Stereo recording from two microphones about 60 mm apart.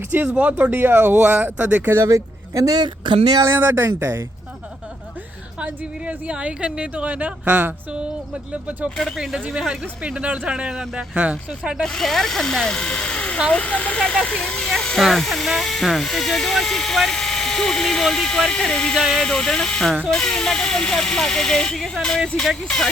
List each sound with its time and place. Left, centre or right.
0.1 s a woman's voice: right
0.8 s speech: right
1.2 s a woman's voice: centre
2.0 s speech: right
3.4 s speech: right
5.5 s a woman's voice: right
9.1 s speech: centre
11.8 s speech: centre